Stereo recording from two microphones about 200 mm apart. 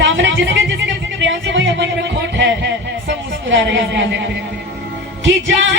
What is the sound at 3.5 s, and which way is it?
Speech, 65° right (ahead or behind).